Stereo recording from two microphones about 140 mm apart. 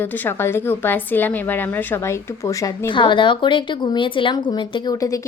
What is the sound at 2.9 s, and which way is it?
A woman's voice, 35° left (ahead or behind).